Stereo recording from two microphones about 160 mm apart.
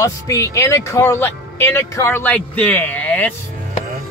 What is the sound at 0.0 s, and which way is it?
Speech, 20° left (ahead or behind).